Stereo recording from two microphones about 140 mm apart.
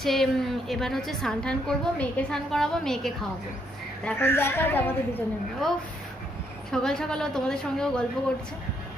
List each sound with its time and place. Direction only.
0.0 s a woman's voice: centre (ahead or behind)
4.0 s a woman's voice: 15° left (ahead or behind)
6.7 s a woman's voice: 5° left (ahead or behind)